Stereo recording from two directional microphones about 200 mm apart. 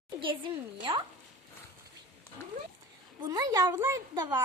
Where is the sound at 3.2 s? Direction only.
20° right (ahead or behind).